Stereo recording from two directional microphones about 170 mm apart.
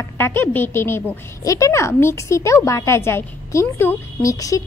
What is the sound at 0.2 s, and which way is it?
A woman's voice, 10° left (ahead or behind).